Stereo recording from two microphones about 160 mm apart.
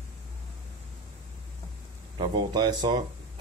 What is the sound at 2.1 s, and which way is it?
Speech, 30° right (ahead or behind).